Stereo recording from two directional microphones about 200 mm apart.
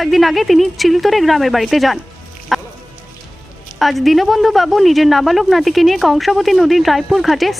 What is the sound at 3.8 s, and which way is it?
Speech, centre (ahead or behind).